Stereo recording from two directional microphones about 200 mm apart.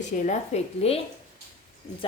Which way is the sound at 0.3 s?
30° left (ahead or behind).